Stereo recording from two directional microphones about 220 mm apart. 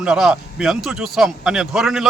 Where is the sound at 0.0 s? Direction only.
5° right (ahead or behind).